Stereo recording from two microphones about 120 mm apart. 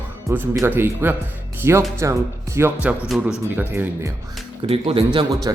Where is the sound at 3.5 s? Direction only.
15° right (ahead or behind).